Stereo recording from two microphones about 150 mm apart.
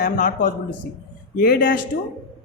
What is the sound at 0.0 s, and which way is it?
Speech, 60° left (ahead or behind).